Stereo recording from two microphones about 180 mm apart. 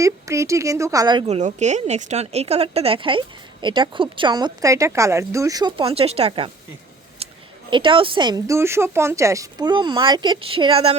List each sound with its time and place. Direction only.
0.0 s a woman's voice: 15° right (ahead or behind)
1.3 s a woman's voice: 40° right (ahead or behind)
7.2 s a sound: 35° right (ahead or behind)
7.7 s a woman's voice: 30° right (ahead or behind)